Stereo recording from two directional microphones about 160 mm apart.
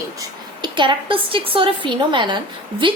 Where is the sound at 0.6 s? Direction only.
30° right (ahead or behind).